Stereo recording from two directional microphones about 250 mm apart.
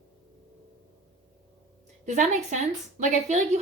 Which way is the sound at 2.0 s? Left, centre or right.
Right.